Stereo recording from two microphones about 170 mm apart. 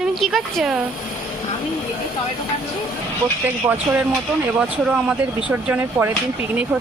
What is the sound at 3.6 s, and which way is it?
A woman's voice, 15° right (ahead or behind).